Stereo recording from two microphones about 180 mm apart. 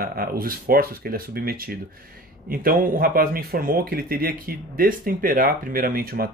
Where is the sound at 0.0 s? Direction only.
55° right (ahead or behind).